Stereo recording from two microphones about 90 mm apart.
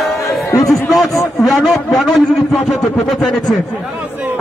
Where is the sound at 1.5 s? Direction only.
Centre (ahead or behind).